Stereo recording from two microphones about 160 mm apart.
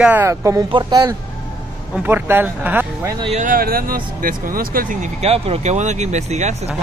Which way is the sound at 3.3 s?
60° right (ahead or behind).